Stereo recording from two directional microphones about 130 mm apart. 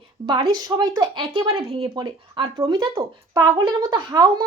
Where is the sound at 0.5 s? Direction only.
30° right (ahead or behind).